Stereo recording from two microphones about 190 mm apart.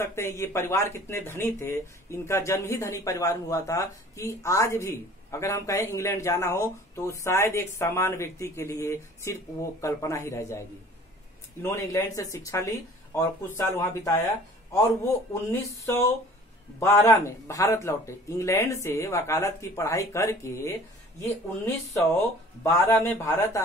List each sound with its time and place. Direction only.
0.0 s speech: 15° left (ahead or behind)
11.6 s speech: 15° left (ahead or behind)
15.8 s speech: 15° left (ahead or behind)